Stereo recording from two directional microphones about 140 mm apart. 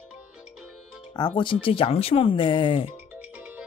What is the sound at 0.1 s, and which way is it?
Music, 5° right (ahead or behind).